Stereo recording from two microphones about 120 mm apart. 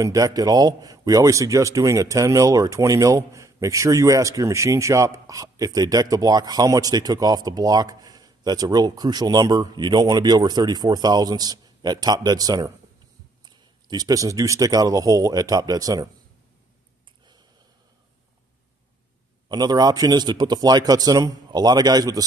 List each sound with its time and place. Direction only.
0.0 s speech: 30° right (ahead or behind)
19.5 s speech: 35° right (ahead or behind)